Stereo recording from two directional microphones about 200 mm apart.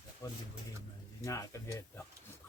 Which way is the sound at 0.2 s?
20° left (ahead or behind).